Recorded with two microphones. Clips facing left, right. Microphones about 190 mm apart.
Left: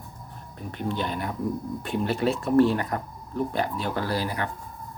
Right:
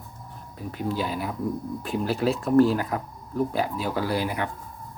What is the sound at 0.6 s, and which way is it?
Speech, 5° right (ahead or behind).